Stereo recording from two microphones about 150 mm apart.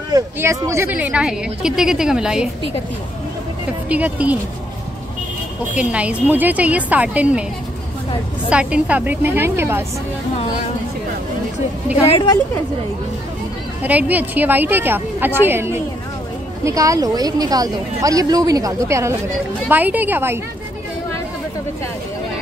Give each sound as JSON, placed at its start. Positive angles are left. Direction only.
{"t": 0.1, "sound": "a woman's voice", "side_deg": -20}
{"t": 3.9, "sound": "a woman's voice", "side_deg": -10}
{"t": 5.8, "sound": "a woman's voice", "side_deg": -10}
{"t": 8.5, "sound": "a woman's voice", "side_deg": -10}
{"t": 13.8, "sound": "a woman's voice", "side_deg": -10}